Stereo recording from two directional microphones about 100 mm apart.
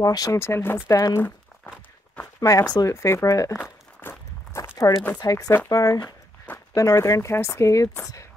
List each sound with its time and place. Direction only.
0.0 s speech: 35° left (ahead or behind)
0.4 s speech: 25° left (ahead or behind)
2.4 s speech: 35° left (ahead or behind)
4.0 s walk: 25° left (ahead or behind)
4.9 s speech: 35° left (ahead or behind)